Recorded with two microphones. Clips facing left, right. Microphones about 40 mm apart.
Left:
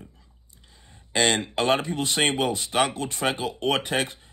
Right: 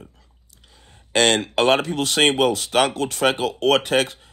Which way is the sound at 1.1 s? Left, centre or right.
Right.